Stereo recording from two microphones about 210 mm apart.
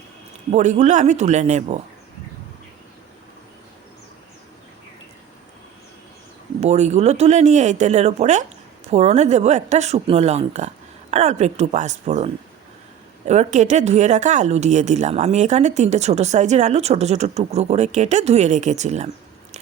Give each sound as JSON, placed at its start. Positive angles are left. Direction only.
{"t": 0.5, "sound": "speech", "side_deg": -35}
{"t": 6.6, "sound": "speech", "side_deg": -30}